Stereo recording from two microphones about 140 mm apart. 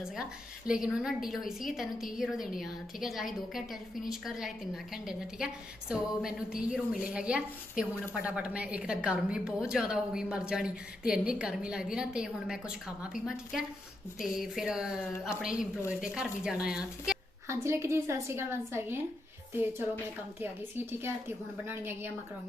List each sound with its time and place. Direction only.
0.7 s a woman's voice: 5° right (ahead or behind)
17.5 s a woman's voice: 20° right (ahead or behind)
20.4 s a woman's voice: 15° right (ahead or behind)